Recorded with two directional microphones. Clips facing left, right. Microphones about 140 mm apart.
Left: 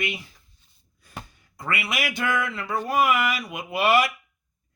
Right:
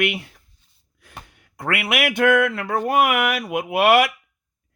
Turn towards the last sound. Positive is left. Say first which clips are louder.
# right 5 dB
turn(degrees=-65)  # may be behind; listen again after turning